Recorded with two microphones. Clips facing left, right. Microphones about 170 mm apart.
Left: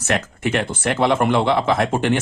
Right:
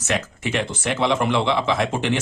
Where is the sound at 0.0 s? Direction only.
55° left (ahead or behind).